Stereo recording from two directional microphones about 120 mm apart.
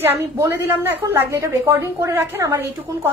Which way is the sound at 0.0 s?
20° right (ahead or behind).